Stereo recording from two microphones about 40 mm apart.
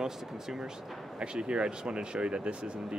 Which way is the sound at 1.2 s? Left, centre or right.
Right.